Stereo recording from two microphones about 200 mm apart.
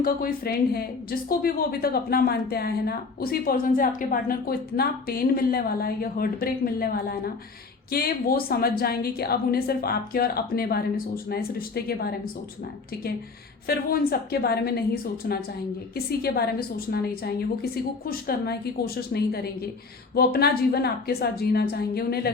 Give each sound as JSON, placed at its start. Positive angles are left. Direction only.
{"t": 0.0, "sound": "a woman's voice", "side_deg": 50}
{"t": 13.7, "sound": "a woman's voice", "side_deg": 50}